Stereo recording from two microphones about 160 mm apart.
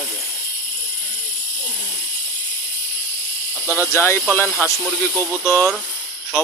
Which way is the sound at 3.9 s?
15° left (ahead or behind).